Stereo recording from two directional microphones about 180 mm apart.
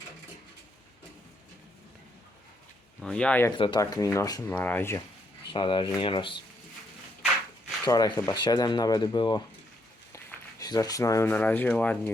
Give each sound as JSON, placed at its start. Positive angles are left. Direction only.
{"t": 3.0, "sound": "speech", "side_deg": 5}
{"t": 3.6, "sound": "speech", "side_deg": 25}
{"t": 5.5, "sound": "speech", "side_deg": 25}
{"t": 7.9, "sound": "speech", "side_deg": 20}
{"t": 10.6, "sound": "speech", "side_deg": 20}